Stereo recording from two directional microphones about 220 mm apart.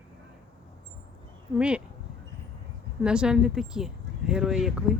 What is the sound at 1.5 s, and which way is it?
Speech, 5° right (ahead or behind).